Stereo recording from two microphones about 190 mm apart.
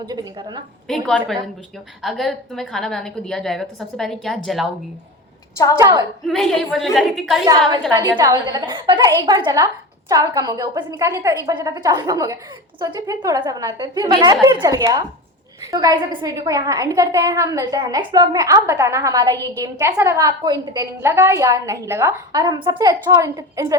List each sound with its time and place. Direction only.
0.0 s a woman's voice: 20° right (ahead or behind)
0.9 s a woman's voice: centre (ahead or behind)
5.8 s a woman's voice: 20° right (ahead or behind)
6.2 s a woman's voice: centre (ahead or behind)
7.9 s a woman's voice: 20° right (ahead or behind)